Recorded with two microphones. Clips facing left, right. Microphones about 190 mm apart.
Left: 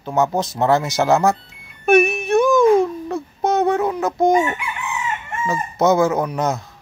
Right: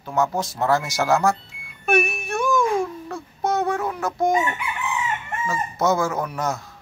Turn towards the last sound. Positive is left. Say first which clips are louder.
# left 5 dB
turn(degrees=20)  # may be behind; listen again after turning